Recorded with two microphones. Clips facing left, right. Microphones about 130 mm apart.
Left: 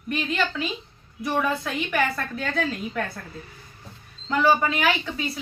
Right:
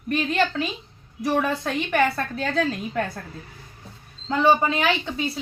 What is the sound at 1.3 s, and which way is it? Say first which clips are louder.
A woman's voice: right 2 dB; 35° right (ahead or behind).